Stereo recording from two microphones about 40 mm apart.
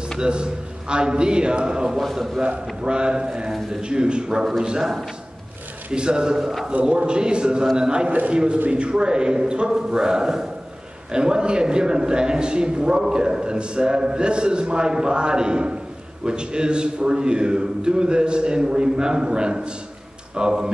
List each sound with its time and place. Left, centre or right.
0.2 s a man's voice: right
5.9 s a man's voice: right